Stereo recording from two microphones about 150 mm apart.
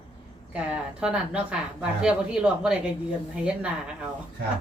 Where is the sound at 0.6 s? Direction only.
5° right (ahead or behind).